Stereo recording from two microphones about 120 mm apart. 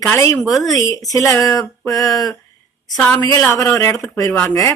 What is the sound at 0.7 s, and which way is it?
Speech, 30° left (ahead or behind).